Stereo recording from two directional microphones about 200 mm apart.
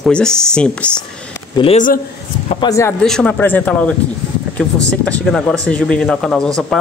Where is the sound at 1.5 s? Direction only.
25° left (ahead or behind).